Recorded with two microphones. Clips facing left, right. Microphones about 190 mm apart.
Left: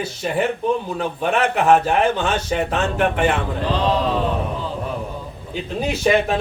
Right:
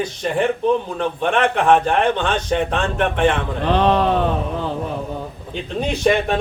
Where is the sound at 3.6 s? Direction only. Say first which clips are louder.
Right 6 dB; 60° right (ahead or behind).